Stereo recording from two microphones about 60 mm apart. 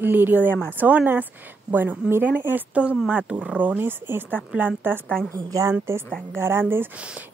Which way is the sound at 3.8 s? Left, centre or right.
Right.